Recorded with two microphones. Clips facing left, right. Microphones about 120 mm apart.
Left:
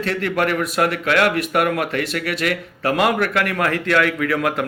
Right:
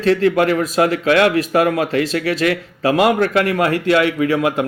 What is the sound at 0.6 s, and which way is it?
A man's voice, 30° right (ahead or behind).